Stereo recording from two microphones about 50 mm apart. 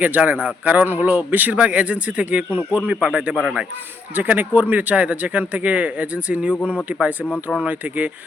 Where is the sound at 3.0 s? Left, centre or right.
Centre.